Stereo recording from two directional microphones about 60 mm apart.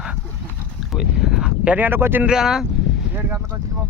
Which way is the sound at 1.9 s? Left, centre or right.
Right.